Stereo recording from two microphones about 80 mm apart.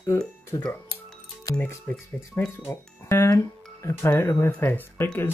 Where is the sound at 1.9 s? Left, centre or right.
Left.